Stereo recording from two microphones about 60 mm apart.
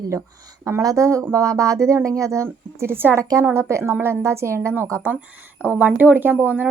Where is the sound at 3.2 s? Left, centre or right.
Right.